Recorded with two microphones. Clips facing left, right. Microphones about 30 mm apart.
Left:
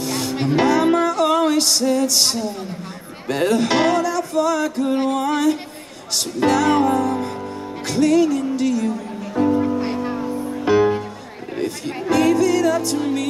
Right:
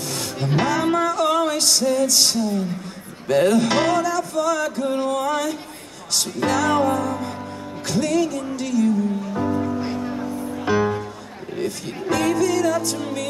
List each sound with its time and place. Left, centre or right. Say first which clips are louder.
0.0 s music: left 5 dB; centre